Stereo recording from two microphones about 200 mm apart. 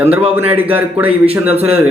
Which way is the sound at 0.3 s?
10° right (ahead or behind).